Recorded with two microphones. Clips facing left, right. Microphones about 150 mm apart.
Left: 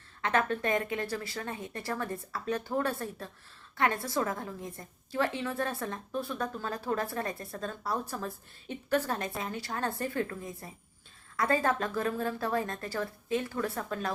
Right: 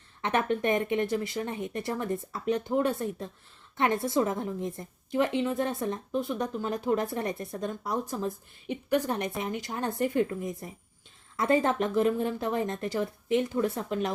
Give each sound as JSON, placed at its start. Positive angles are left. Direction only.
{"t": 0.2, "sound": "a woman's voice", "side_deg": -20}